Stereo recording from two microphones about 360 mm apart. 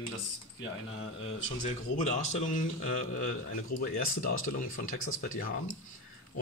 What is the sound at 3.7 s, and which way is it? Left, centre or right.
Speech, left.